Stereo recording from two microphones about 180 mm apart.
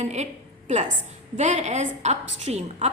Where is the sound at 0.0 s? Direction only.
40° right (ahead or behind).